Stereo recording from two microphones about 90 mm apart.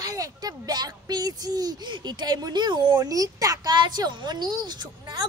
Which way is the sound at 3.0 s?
40° right (ahead or behind).